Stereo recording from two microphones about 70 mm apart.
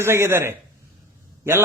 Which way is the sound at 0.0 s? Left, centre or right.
Right.